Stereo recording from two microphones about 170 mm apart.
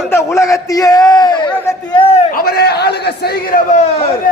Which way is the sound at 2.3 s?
65° left (ahead or behind).